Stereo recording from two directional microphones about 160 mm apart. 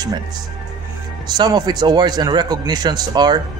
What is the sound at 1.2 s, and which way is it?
Speech, 25° right (ahead or behind).